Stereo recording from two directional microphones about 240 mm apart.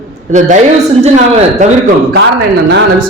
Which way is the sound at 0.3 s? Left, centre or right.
Right.